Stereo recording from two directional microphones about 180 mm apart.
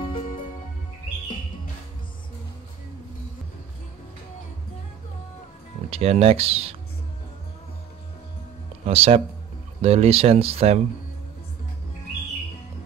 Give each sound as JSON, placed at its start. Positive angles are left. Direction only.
{"t": 5.9, "sound": "speech", "side_deg": -35}
{"t": 8.8, "sound": "speech", "side_deg": -35}